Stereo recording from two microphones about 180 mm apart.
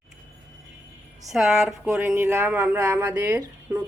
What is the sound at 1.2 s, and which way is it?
Speech, centre (ahead or behind).